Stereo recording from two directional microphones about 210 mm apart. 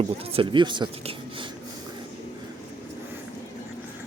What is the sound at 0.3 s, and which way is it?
Speech, 20° right (ahead or behind).